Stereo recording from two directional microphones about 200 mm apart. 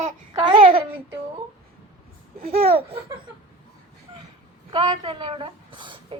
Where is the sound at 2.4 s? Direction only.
30° right (ahead or behind).